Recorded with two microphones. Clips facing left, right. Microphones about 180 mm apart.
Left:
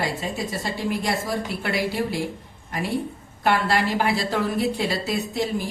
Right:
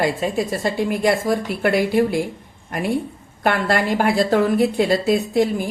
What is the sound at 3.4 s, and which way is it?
A woman's voice, 55° right (ahead or behind).